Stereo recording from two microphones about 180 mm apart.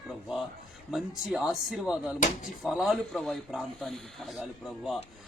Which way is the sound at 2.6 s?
Centre (ahead or behind).